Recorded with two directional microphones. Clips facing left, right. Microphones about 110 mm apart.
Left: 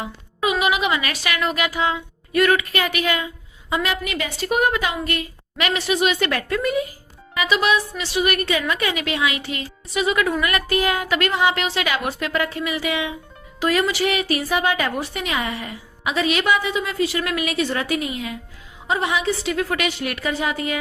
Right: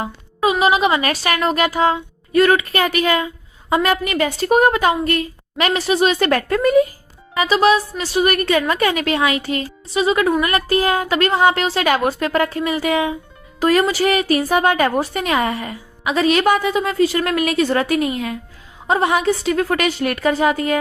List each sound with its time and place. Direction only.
0.0 s a sound: 35° right (ahead or behind)
0.6 s a woman's voice: 35° right (ahead or behind)
9.9 s a woman's voice: 30° right (ahead or behind)